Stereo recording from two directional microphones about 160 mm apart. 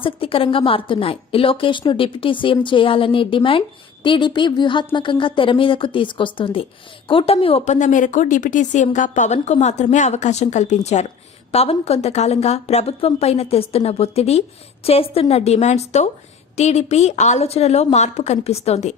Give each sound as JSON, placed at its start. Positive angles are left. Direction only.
{"t": 0.0, "sound": "a woman's voice", "side_deg": 35}